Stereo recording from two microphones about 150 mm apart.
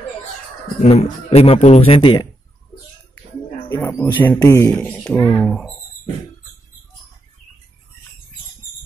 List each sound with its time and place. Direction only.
0.8 s a man's voice: 45° left (ahead or behind)
3.6 s speech: 15° left (ahead or behind)
4.7 s speech: 5° left (ahead or behind)